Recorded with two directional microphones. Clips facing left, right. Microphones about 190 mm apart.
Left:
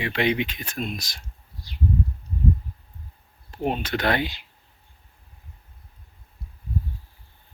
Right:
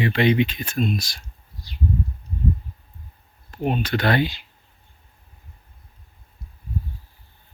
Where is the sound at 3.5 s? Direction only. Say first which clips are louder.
Right 2 dB; 25° left (ahead or behind).